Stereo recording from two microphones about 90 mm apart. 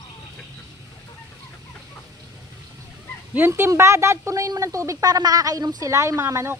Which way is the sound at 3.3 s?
25° right (ahead or behind).